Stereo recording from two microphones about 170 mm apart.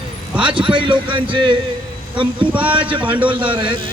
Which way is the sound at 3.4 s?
30° right (ahead or behind).